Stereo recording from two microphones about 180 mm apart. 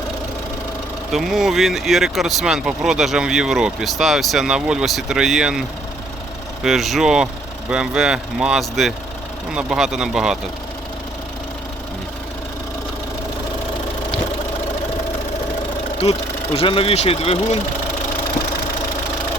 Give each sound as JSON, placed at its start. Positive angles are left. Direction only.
{"t": 1.1, "sound": "speech", "side_deg": 0}
{"t": 16.0, "sound": "speech", "side_deg": 35}